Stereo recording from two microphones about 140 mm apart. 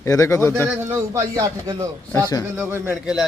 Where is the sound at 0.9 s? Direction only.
20° right (ahead or behind).